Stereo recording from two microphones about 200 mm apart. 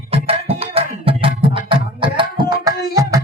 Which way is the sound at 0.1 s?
30° right (ahead or behind).